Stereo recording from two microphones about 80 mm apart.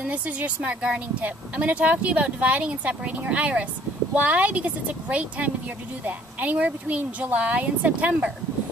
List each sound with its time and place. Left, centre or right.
0.0 s speech: centre